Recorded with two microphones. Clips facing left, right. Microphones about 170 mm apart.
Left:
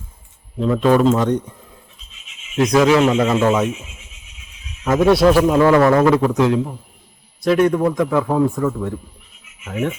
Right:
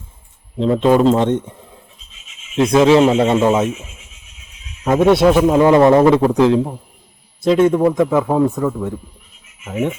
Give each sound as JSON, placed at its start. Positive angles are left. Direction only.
{"t": 0.6, "sound": "speech", "side_deg": -25}
{"t": 2.6, "sound": "speech", "side_deg": -25}
{"t": 4.8, "sound": "a man's voice", "side_deg": -15}